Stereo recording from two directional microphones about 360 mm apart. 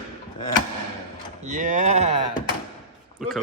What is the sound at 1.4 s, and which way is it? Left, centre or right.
Speech, right.